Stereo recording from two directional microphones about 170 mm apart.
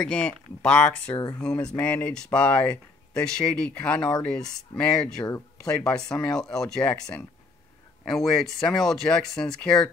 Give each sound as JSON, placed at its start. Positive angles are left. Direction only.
{"t": 0.0, "sound": "speech", "side_deg": 5}